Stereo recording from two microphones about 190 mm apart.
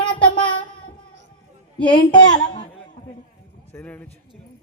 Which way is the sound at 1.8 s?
25° left (ahead or behind).